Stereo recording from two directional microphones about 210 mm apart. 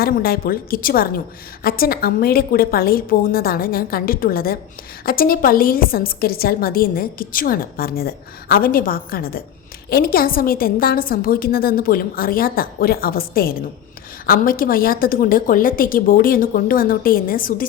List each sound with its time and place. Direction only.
0.0 s a woman's voice: 45° left (ahead or behind)